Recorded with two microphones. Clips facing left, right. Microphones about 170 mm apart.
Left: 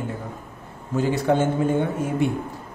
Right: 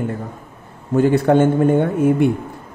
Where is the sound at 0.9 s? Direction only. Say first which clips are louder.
Right 7 dB; 55° right (ahead or behind).